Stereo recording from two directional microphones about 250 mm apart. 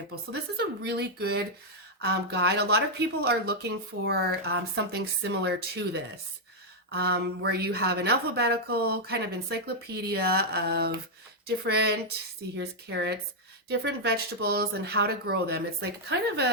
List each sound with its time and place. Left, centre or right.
0.5 s speech: right